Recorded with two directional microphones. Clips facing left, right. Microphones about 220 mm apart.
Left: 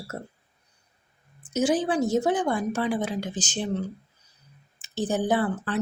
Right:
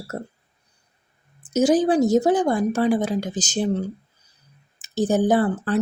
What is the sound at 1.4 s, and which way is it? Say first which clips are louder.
Speech: right 6 dB; 40° right (ahead or behind).